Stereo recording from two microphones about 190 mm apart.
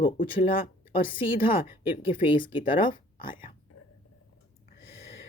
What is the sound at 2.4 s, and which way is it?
Speech, 25° left (ahead or behind).